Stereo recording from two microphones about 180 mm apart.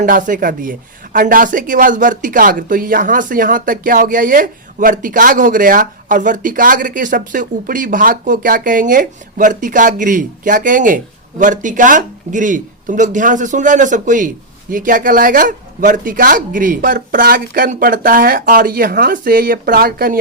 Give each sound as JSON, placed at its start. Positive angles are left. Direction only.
{"t": 0.0, "sound": "speech", "side_deg": -45}